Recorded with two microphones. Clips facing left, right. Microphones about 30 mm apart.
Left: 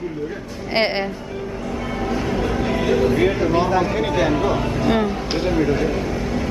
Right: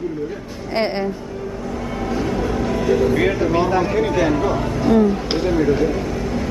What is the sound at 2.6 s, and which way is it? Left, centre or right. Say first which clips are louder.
Vehicle: right 2 dB; left.